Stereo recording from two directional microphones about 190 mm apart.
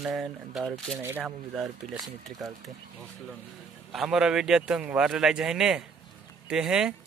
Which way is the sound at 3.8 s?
Centre (ahead or behind).